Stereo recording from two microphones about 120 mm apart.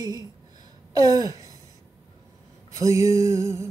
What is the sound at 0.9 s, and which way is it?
Gasp, 30° right (ahead or behind).